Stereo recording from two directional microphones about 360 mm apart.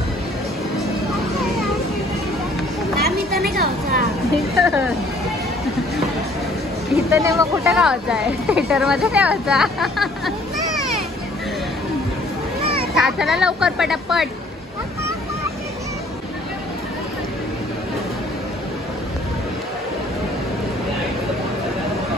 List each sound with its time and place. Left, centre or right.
3.0 s a sound: right
4.6 s speech: centre
7.1 s speech: centre
12.9 s speech: centre